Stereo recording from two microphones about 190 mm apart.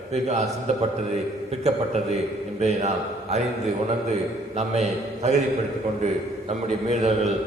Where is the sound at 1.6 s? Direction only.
35° right (ahead or behind).